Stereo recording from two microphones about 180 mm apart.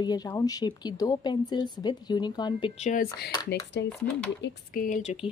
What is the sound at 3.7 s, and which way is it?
Speech, 75° left (ahead or behind).